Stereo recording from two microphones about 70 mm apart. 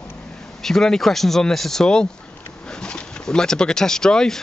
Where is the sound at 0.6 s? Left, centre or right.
Centre.